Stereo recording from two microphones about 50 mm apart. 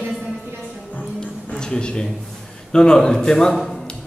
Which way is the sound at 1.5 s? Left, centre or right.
Centre.